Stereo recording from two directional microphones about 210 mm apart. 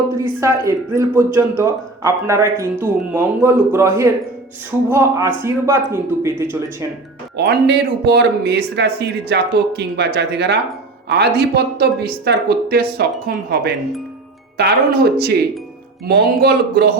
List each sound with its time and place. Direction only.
0.3 s speech: 10° right (ahead or behind)
7.3 s speech: 50° right (ahead or behind)